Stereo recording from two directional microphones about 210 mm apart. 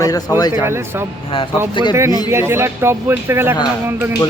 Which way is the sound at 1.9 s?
15° right (ahead or behind).